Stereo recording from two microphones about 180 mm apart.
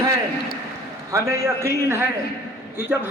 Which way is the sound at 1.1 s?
15° right (ahead or behind).